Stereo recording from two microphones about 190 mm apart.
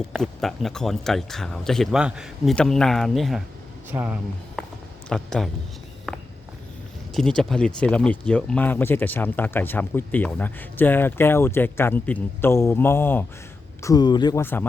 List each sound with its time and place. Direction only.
0.1 s speech: centre (ahead or behind)
5.0 s speech: 5° left (ahead or behind)
6.1 s walk: centre (ahead or behind)
7.1 s speech: centre (ahead or behind)
13.8 s speech: 20° left (ahead or behind)
14.4 s speech: 10° left (ahead or behind)